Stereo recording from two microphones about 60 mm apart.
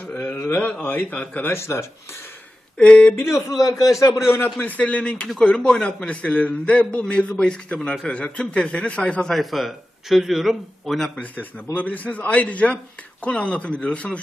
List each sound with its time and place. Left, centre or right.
0.2 s a sound: left
0.8 s a man's voice: left
1.5 s speech: left
2.7 s a man's voice: centre
3.2 s speech: left
3.6 s a man's voice: left
4.3 s a man's voice: left
4.6 s a man's voice: left
9.3 s speech: centre
11.2 s a man's voice: left